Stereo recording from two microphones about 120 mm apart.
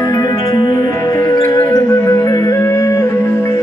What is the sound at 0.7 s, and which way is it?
Music, 25° left (ahead or behind).